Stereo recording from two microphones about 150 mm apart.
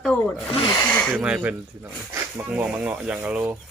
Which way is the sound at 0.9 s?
10° left (ahead or behind).